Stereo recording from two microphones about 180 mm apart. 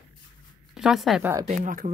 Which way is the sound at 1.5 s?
45° right (ahead or behind).